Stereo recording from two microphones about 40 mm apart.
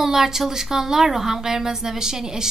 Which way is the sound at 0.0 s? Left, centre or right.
Centre.